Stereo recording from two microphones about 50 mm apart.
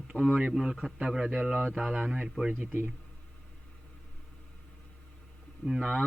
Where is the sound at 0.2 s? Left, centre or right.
Centre; by 1.7 s right.